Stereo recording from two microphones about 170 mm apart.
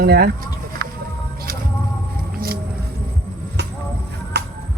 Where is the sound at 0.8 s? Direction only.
60° right (ahead or behind).